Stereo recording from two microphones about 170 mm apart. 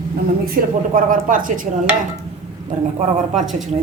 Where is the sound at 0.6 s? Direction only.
55° right (ahead or behind).